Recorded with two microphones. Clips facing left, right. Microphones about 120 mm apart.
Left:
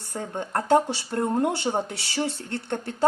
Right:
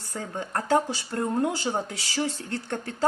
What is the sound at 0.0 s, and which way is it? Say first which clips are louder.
Speech: left 2 dB; 60° left (ahead or behind).